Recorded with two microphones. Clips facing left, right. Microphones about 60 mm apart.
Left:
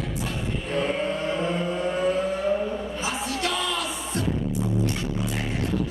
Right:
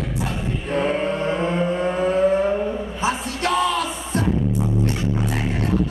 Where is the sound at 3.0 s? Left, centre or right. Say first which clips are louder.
Right 6 dB; right.